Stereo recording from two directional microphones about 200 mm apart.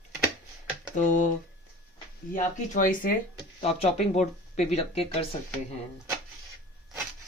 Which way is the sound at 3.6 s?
30° left (ahead or behind).